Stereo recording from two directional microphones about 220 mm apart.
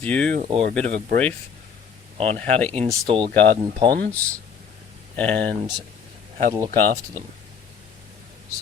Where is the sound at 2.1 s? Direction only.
25° right (ahead or behind).